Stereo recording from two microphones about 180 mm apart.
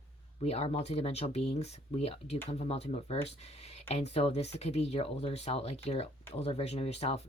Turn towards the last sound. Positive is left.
turn(degrees=35)  # may be behind; listen again after turning